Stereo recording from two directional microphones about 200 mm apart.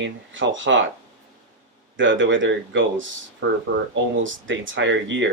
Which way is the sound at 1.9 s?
70° right (ahead or behind).